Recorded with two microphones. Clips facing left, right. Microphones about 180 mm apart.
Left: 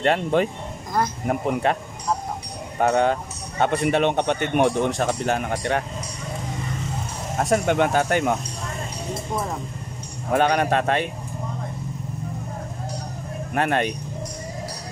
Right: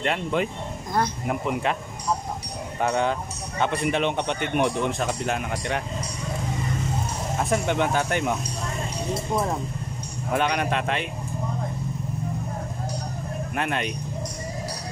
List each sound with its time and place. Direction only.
0.0 s speech: 40° left (ahead or behind)
2.8 s speech: 50° left (ahead or behind)
7.5 s speech: 50° left (ahead or behind)
10.3 s speech: 45° left (ahead or behind)
13.6 s speech: 50° left (ahead or behind)